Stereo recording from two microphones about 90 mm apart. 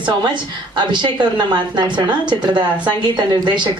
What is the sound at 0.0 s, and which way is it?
A woman's voice, 55° right (ahead or behind).